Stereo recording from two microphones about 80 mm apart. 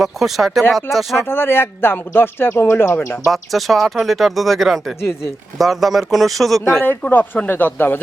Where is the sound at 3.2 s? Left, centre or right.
Centre.